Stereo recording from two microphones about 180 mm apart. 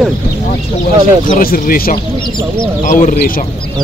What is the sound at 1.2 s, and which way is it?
Speech, 50° left (ahead or behind).